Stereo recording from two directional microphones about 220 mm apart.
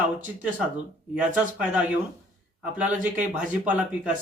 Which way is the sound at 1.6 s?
5° right (ahead or behind).